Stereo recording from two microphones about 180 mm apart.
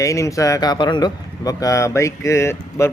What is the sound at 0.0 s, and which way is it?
Speech, 15° left (ahead or behind).